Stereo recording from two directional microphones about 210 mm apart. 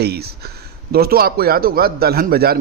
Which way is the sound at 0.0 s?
50° right (ahead or behind).